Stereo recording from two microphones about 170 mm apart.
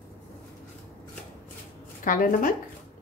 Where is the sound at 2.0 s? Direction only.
55° left (ahead or behind).